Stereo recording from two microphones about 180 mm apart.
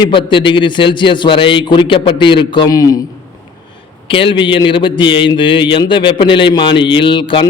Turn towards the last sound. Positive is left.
turn(degrees=25)  # may be behind; listen again after turning